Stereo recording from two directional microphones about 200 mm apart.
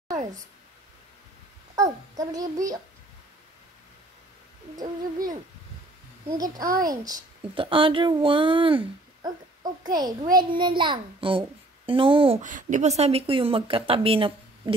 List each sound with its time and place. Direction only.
1.8 s a child's voice: 15° right (ahead or behind)
4.7 s a child's voice: 20° right (ahead or behind)